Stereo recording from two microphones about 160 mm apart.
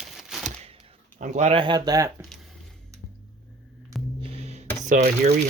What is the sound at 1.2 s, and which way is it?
Speech, 45° right (ahead or behind).